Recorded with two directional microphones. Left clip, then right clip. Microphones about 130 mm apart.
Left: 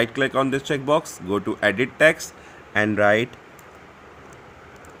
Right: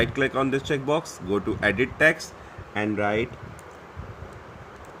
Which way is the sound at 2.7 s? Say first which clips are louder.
Left 7 dB; 75° left (ahead or behind).